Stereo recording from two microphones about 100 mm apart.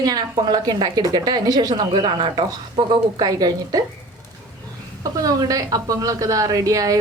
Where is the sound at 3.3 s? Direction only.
40° right (ahead or behind).